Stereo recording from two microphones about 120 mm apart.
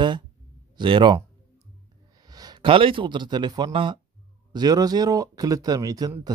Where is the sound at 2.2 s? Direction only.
35° right (ahead or behind).